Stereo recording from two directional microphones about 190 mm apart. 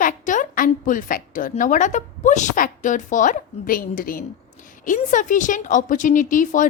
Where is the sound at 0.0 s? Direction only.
45° left (ahead or behind).